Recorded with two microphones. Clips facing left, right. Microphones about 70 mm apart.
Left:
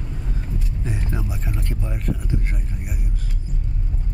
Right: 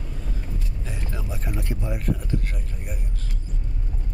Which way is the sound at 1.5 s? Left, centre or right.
Centre.